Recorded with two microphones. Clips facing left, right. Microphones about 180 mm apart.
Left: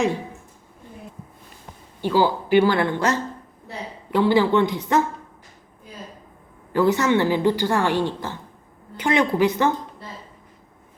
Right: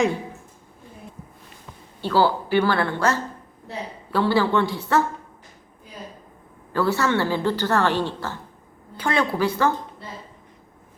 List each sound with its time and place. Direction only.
2.0 s speech: 15° left (ahead or behind)
6.7 s speech: 20° left (ahead or behind)